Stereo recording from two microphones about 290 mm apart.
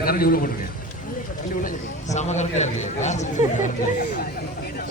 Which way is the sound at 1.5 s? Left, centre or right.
Left.